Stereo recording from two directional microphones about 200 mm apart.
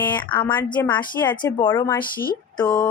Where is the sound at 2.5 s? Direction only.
20° left (ahead or behind).